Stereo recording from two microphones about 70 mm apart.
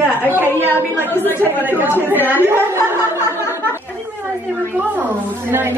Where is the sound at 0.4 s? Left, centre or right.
Left.